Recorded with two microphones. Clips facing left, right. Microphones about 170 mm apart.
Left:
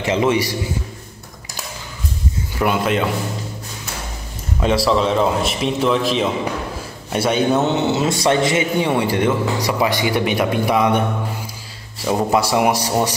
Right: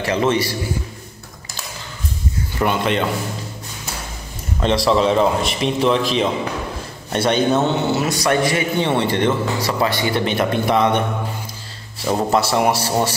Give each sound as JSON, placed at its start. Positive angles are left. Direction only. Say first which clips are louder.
{"t": 0.0, "sound": "speech", "louder": "left 1 dB", "side_deg": 15}
{"t": 2.6, "sound": "a man's voice", "louder": "left 1 dB", "side_deg": 5}
{"t": 4.6, "sound": "a man's voice", "louder": "even", "side_deg": 5}
{"t": 7.7, "sound": "a man's voice", "louder": "left 1 dB", "side_deg": 25}
{"t": 8.7, "sound": "speech", "louder": "left 1 dB", "side_deg": 10}
{"t": 12.1, "sound": "speech", "louder": "left 1 dB", "side_deg": 15}